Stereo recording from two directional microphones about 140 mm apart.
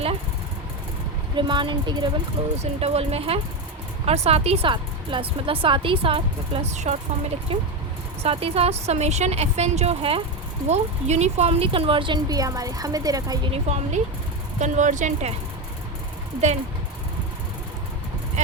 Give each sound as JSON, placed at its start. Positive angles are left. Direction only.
{"t": 1.4, "sound": "speech", "side_deg": -35}
{"t": 2.4, "sound": "a woman's voice", "side_deg": -45}
{"t": 6.9, "sound": "a woman's voice", "side_deg": -55}
{"t": 10.7, "sound": "speech", "side_deg": -50}
{"t": 13.5, "sound": "a woman's voice", "side_deg": -50}
{"t": 18.4, "sound": "speech", "side_deg": -60}